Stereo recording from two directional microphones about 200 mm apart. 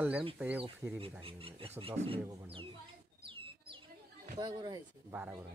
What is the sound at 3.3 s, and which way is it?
Bird, 25° right (ahead or behind).